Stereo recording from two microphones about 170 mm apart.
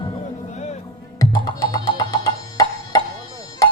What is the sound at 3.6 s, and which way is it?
Tabla, 20° left (ahead or behind).